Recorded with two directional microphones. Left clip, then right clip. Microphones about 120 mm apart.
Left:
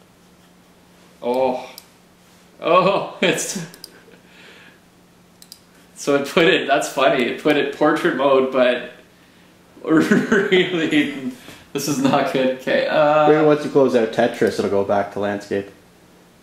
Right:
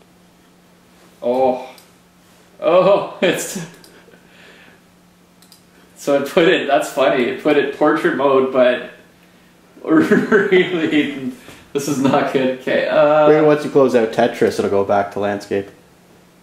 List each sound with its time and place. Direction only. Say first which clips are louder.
1.2 s speech: right 3 dB; 40° left (ahead or behind)
2.6 s speech: right 3 dB; 40° left (ahead or behind)
3.5 s speech: right 1 dB; 5° left (ahead or behind)
5.9 s speech: right 2 dB; 40° left (ahead or behind)
9.8 s speech: right 3 dB; 40° left (ahead or behind)
13.3 s speech: right 2 dB; centre (ahead or behind)